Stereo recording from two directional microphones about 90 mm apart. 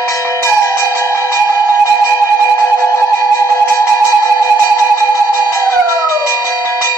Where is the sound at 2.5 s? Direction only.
30° left (ahead or behind).